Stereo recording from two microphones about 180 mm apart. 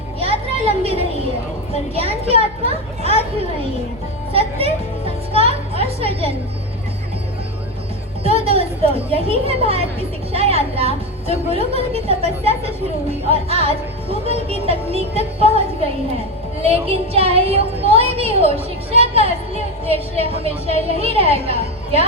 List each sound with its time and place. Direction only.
0.2 s children playing: 35° right (ahead or behind)
4.3 s music: 30° right (ahead or behind)
8.2 s a woman's voice: 35° right (ahead or behind)
16.6 s a woman's voice: 35° right (ahead or behind)